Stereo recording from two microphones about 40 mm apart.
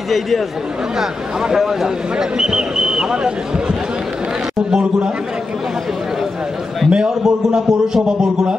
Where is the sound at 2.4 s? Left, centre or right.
Centre.